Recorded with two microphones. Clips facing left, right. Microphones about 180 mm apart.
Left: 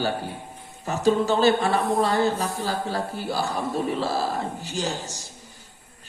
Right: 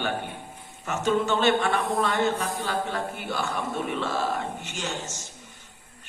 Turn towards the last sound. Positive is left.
turn(degrees=35)  # may be behind; listen again after turning